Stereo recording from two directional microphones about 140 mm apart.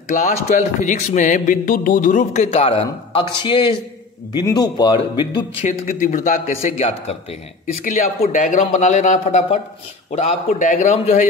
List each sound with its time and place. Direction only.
0.1 s speech: 60° left (ahead or behind); by 5.4 s 35° left (ahead or behind)
5.7 s speech: 65° left (ahead or behind); by 7.2 s 50° left (ahead or behind)
7.6 s speech: 60° left (ahead or behind)